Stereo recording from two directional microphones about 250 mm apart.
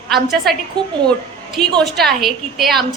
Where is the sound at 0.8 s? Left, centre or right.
Centre.